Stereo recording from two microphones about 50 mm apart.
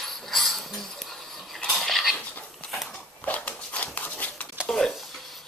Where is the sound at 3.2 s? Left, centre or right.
Left.